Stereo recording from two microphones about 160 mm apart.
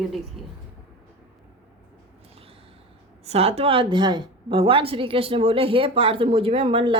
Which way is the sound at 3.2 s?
40° right (ahead or behind).